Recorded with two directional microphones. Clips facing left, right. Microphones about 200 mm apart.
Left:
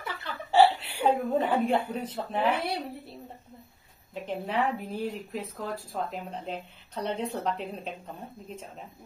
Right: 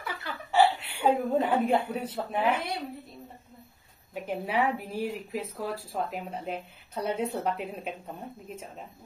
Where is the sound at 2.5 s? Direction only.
35° left (ahead or behind).